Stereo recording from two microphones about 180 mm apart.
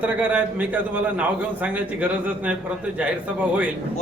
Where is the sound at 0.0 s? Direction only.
10° right (ahead or behind).